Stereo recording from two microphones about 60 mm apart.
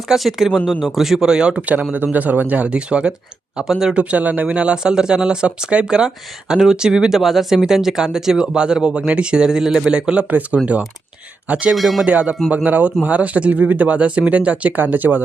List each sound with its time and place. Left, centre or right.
0.1 s speech: centre
1.6 s speech: right; by 3.9 s centre
3.9 s speech: right
11.7 s speech: centre
12.0 s speech: centre